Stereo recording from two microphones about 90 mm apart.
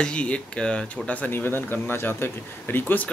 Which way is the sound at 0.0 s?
10° left (ahead or behind).